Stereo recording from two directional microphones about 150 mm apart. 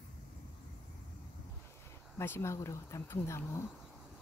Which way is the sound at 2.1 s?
15° left (ahead or behind).